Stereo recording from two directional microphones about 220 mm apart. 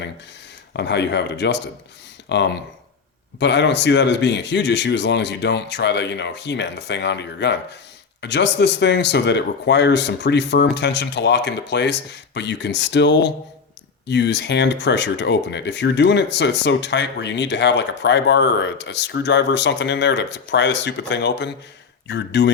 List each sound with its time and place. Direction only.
0.7 s speech: 50° left (ahead or behind)